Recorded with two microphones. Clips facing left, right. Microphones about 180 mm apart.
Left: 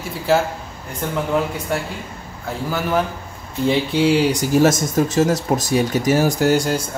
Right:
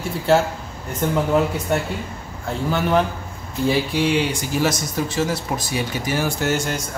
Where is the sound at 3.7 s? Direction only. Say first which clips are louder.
Left 3 dB; 30° left (ahead or behind).